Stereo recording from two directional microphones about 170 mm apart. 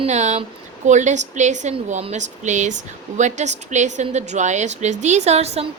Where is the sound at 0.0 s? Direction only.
45° right (ahead or behind).